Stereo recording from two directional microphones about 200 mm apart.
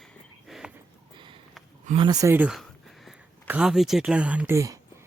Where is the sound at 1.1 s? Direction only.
25° right (ahead or behind).